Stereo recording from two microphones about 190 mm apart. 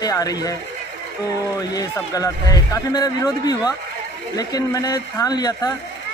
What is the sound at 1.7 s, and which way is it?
Speech, 20° left (ahead or behind).